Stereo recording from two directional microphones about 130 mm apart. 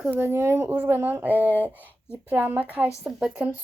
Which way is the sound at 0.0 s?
15° right (ahead or behind).